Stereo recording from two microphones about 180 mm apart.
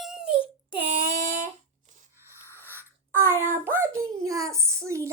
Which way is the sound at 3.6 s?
15° right (ahead or behind).